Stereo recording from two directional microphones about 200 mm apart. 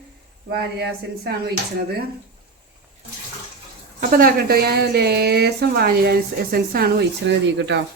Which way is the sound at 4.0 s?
45° right (ahead or behind).